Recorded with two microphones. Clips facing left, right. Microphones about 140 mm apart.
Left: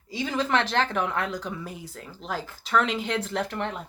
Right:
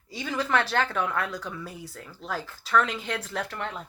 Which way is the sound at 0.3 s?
20° left (ahead or behind).